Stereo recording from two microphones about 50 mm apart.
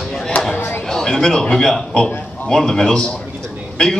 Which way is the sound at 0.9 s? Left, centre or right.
Centre.